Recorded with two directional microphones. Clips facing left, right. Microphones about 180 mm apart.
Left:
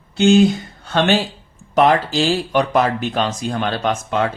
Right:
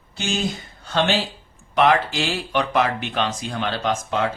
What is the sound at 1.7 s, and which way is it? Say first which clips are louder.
Speech: left 3 dB; 40° left (ahead or behind).